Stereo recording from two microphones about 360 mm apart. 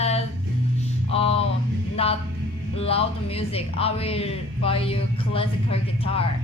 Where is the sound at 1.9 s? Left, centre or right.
Centre.